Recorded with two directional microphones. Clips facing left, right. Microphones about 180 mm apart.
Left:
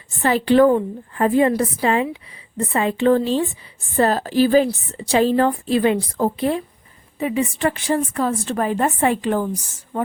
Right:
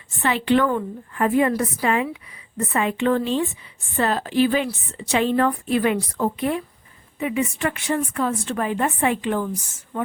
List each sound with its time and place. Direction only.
0.2 s a woman's voice: 40° left (ahead or behind)